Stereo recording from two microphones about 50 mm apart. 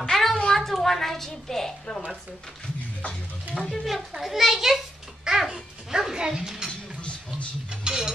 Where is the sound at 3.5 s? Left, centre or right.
Centre.